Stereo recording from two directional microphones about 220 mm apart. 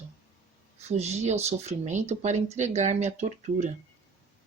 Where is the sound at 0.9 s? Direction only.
30° right (ahead or behind).